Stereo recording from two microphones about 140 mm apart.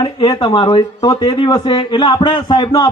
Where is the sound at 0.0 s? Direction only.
35° left (ahead or behind).